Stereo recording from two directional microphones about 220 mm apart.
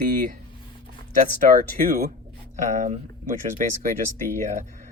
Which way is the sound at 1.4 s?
40° right (ahead or behind).